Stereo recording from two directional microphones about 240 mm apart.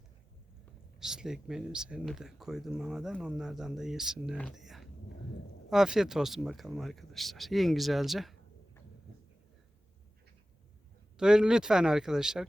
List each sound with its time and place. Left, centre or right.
0.9 s speech: centre
11.2 s speech: centre